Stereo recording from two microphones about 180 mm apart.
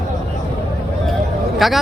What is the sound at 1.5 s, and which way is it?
Speech, centre (ahead or behind).